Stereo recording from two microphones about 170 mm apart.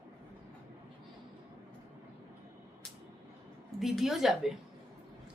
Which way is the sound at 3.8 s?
Centre (ahead or behind).